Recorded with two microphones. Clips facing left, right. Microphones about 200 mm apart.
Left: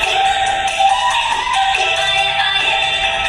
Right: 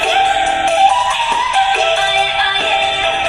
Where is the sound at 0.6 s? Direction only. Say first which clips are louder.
Right 4 dB; 60° right (ahead or behind).